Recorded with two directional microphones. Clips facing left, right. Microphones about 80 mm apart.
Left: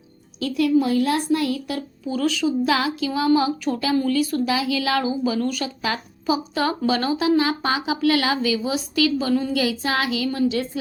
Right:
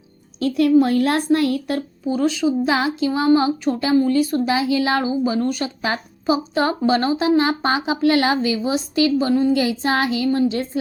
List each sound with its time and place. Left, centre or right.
0.3 s a child's voice: right
2.1 s speech: right